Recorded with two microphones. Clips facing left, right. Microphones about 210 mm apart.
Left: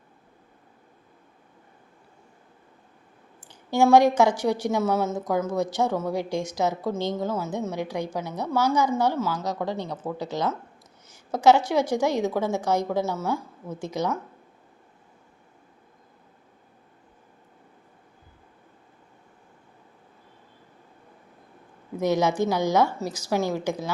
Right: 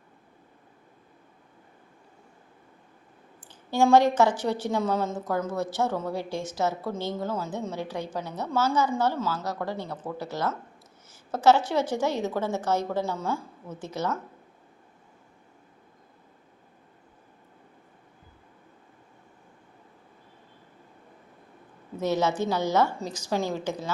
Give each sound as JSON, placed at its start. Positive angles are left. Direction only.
{"t": 3.5, "sound": "a woman's voice", "side_deg": 10}
{"t": 21.9, "sound": "a woman's voice", "side_deg": 15}